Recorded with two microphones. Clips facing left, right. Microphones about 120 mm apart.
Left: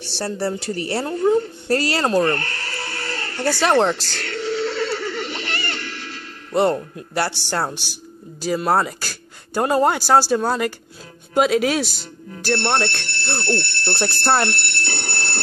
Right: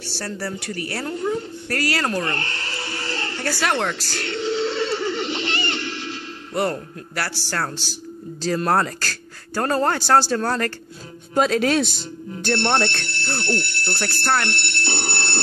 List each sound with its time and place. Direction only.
0.1 s a woman's voice: 25° left (ahead or behind)
2.4 s music: 25° right (ahead or behind)
3.3 s a woman's voice: 25° left (ahead or behind)
4.2 s neigh: 25° right (ahead or behind)
6.5 s a woman's voice: 25° left (ahead or behind)
8.4 s speech: 10° left (ahead or behind)
13.8 s speech: 25° left (ahead or behind)
14.9 s telephone: 25° right (ahead or behind)